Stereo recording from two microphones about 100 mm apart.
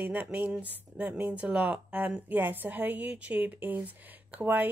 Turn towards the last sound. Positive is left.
turn(degrees=-15)  # may be behind; listen again after turning